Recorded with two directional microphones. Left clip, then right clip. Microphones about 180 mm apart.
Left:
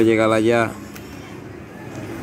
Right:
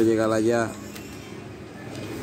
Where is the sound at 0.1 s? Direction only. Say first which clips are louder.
Left 5 dB; 5° left (ahead or behind).